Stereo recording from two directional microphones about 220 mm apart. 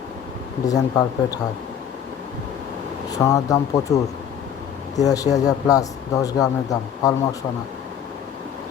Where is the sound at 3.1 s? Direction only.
15° left (ahead or behind).